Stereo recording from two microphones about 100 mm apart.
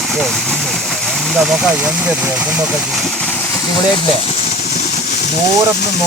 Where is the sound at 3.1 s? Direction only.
15° left (ahead or behind).